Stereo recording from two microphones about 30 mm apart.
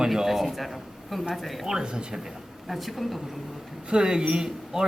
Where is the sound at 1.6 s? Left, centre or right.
Right.